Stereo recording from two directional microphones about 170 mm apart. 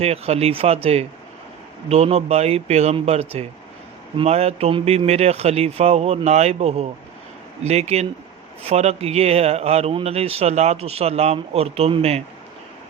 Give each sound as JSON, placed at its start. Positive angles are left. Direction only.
{"t": 0.0, "sound": "speech", "side_deg": -40}